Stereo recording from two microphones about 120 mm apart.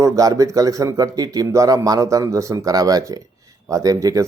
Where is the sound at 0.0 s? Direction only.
30° right (ahead or behind).